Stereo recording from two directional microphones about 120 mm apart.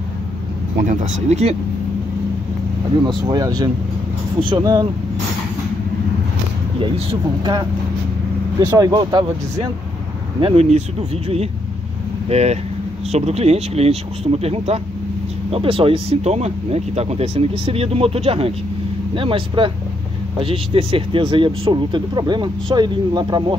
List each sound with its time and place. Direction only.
0.8 s speech: 90° right; by 1.6 s 65° right (ahead or behind)
3.0 s speech: 35° right (ahead or behind)
6.8 s speech: 40° right (ahead or behind)
8.5 s speech: 30° right (ahead or behind)
10.4 s speech: 60° right (ahead or behind); by 23.4 s 40° right (ahead or behind)